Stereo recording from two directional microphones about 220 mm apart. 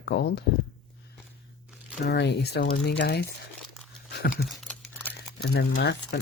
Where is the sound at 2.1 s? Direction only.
50° left (ahead or behind).